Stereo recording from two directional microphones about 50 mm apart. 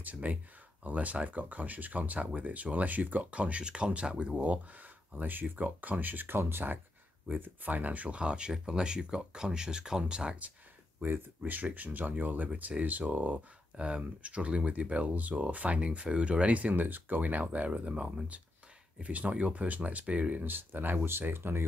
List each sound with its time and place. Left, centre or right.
0.0 s speech: right; by 10.3 s centre
11.0 s speech: right
13.7 s speech: centre; by 21.6 s right